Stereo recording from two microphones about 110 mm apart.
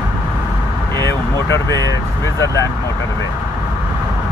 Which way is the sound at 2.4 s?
30° left (ahead or behind).